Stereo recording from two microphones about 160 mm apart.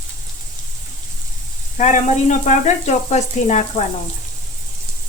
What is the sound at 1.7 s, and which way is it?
Speech, 50° left (ahead or behind).